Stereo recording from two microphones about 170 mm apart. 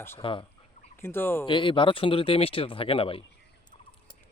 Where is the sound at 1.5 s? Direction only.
30° left (ahead or behind).